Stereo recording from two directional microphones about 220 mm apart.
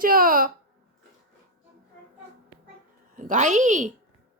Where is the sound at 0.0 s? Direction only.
40° right (ahead or behind).